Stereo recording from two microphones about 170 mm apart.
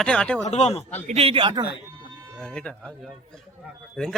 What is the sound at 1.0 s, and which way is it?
Speech, 40° right (ahead or behind).